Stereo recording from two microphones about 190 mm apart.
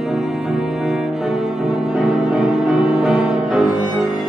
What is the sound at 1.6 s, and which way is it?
Music, 5° right (ahead or behind).